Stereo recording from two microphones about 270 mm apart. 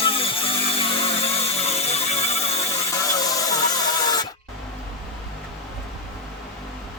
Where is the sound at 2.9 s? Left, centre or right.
Centre.